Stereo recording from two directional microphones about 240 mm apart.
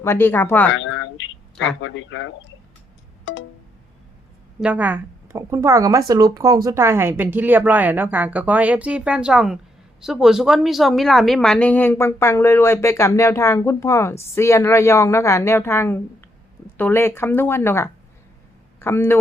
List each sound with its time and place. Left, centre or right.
0.0 s speech: centre
0.7 s a sound: left
1.8 s speech: left
4.6 s speech: centre